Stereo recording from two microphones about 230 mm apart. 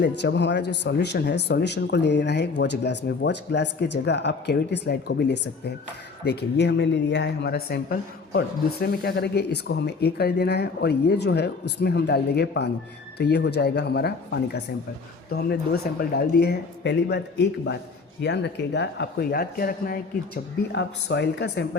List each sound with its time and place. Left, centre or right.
0.0 s speech: left